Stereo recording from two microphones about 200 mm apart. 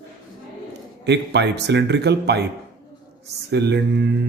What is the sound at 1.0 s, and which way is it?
Speech, 60° right (ahead or behind).